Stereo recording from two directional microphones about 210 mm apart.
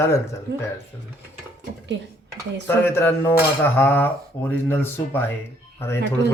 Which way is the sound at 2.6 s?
10° left (ahead or behind).